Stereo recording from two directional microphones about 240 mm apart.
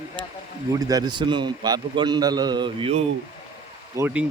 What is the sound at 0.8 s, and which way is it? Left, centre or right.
A man's voice, centre.